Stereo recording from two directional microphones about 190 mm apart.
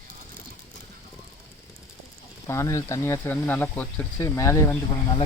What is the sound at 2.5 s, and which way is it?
Speech, 15° left (ahead or behind).